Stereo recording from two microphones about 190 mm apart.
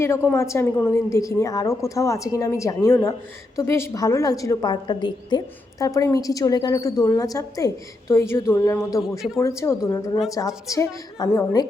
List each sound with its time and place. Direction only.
0.3 s a woman's voice: 15° left (ahead or behind)